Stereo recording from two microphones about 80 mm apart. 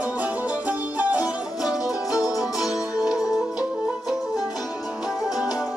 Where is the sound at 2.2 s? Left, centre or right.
Left.